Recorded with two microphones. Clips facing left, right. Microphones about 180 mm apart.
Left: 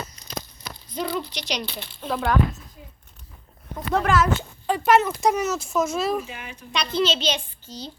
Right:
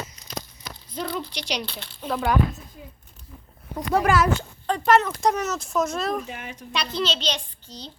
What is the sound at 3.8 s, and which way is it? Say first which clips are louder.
Speech: right 1 dB; 10° right (ahead or behind).